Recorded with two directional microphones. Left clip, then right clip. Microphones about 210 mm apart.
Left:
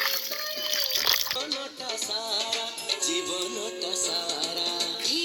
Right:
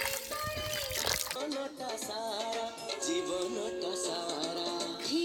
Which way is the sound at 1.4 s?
50° right (ahead or behind).